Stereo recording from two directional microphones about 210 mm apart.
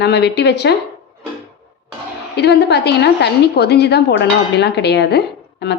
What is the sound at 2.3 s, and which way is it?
A woman's voice, 55° left (ahead or behind).